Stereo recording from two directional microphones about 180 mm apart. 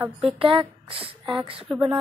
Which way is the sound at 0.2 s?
30° right (ahead or behind).